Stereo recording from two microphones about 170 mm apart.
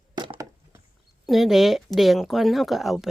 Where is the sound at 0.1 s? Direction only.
25° right (ahead or behind).